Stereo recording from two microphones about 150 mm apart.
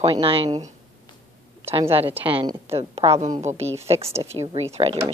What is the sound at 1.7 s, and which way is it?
Speech, 40° right (ahead or behind).